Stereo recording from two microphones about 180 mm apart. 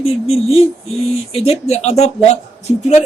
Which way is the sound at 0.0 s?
35° left (ahead or behind).